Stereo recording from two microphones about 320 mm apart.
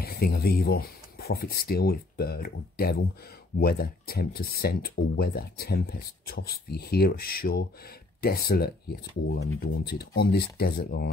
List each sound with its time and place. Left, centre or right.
0.0 s speech: left